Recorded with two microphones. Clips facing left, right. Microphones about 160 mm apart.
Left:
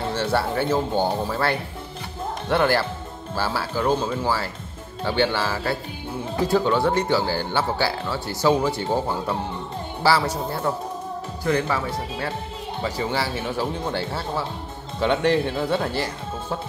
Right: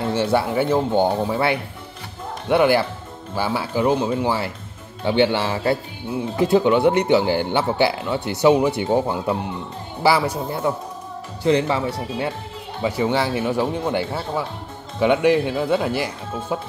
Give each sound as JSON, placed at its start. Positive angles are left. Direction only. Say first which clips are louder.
{"t": 0.1, "sound": "speech", "louder": "right 4 dB", "side_deg": -15}